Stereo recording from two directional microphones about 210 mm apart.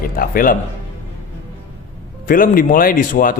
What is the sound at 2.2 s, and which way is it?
Speech, 40° left (ahead or behind).